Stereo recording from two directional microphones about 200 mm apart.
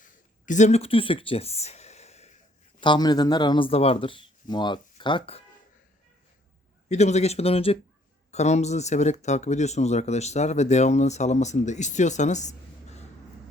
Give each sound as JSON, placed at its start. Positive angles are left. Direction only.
{"t": 0.0, "sound": "a sound", "side_deg": 40}
{"t": 2.8, "sound": "speech", "side_deg": 20}
{"t": 6.8, "sound": "speech", "side_deg": 35}